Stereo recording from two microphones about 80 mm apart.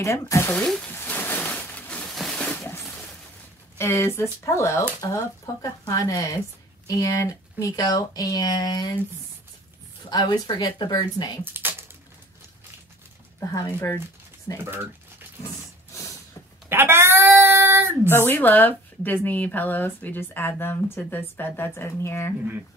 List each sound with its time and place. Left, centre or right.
0.0 s speech: left
0.7 s speech: centre
0.9 s a sound: left
3.7 s speech: left
10.0 s speech: left
11.4 s speech: right
13.5 s speech: left
14.6 s speech: right
16.6 s a sound: right
18.1 s speech: left